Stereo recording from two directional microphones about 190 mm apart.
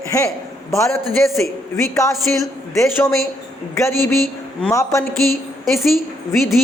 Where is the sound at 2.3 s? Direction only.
10° left (ahead or behind).